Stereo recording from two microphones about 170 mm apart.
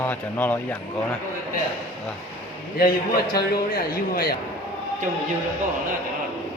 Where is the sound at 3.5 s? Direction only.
65° left (ahead or behind).